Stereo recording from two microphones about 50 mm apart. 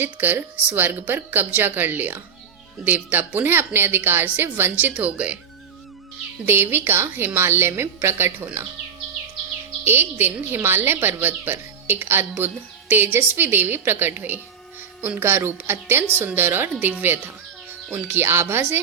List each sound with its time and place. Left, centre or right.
0.0 s a woman's voice: right
4.7 s speech: right
6.4 s a woman's voice: right
9.8 s a woman's voice: right
17.9 s a woman's voice: right